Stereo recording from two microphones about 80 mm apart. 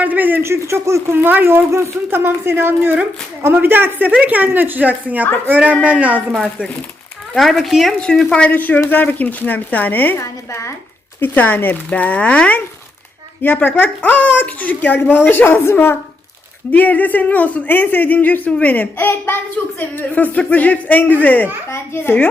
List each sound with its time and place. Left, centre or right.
0.0 s speech: right
7.3 s a woman's voice: centre
8.4 s speech: left
10.2 s a woman's voice: left
11.2 s speech: left